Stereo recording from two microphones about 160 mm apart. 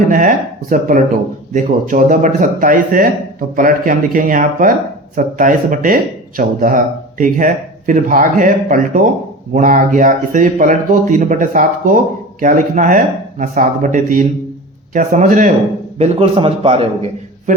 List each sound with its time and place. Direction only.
0.1 s speech: 50° right (ahead or behind)
16.0 s a man's voice: 40° right (ahead or behind)